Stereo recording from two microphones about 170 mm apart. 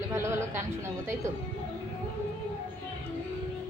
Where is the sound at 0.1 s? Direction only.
15° right (ahead or behind).